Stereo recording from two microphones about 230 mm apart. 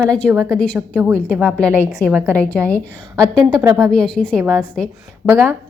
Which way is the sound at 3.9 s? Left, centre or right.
Centre.